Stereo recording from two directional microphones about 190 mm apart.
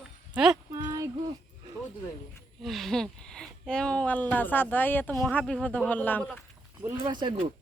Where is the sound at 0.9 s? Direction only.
15° right (ahead or behind).